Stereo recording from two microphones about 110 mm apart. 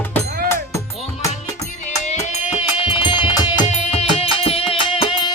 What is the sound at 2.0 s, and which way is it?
Music, 90° left.